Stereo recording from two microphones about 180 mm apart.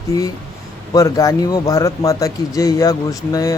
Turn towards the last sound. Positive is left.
turn(degrees=20)  # may be behind; listen again after turning